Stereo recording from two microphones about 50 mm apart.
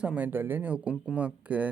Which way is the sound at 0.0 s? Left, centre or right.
Right.